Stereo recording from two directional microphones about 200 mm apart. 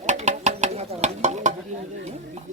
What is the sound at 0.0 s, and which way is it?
Stir, 35° right (ahead or behind).